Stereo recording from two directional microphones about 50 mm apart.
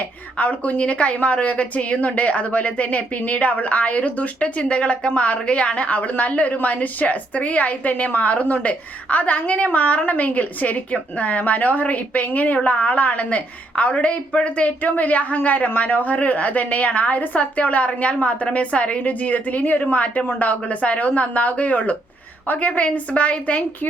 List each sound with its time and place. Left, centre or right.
0.3 s a woman's voice: left